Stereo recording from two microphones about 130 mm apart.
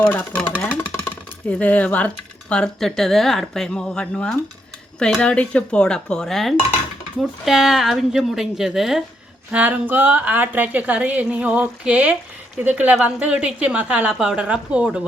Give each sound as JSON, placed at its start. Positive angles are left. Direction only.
{"t": 0.0, "sound": "speech", "side_deg": 15}
{"t": 1.5, "sound": "a woman's voice", "side_deg": 10}